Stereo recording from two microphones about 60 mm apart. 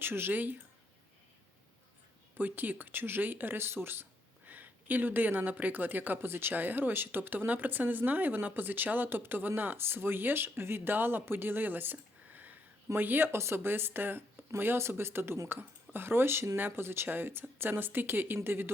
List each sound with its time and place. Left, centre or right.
0.0 s speech: right
2.4 s speech: right